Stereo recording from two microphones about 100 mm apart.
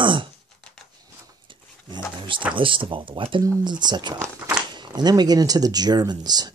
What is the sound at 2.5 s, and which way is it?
Speech, 60° right (ahead or behind).